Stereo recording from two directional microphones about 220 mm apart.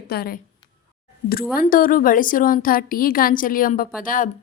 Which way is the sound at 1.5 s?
40° left (ahead or behind).